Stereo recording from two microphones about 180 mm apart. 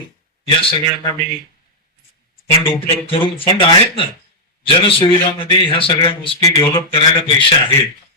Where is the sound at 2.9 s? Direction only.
30° left (ahead or behind).